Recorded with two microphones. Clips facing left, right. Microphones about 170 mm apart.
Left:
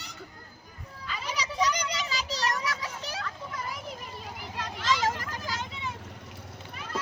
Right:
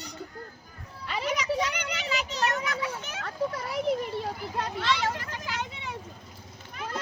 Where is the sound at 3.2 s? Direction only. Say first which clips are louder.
Right 6 dB; 70° right (ahead or behind).